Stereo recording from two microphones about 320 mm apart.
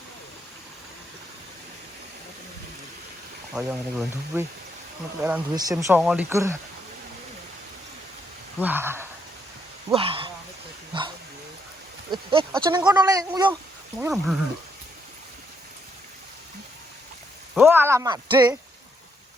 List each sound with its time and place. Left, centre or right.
3.5 s speech: centre
8.5 s speech: centre
10.9 s dog: centre
12.1 s speech: centre
14.0 s speech: centre
17.5 s speech: centre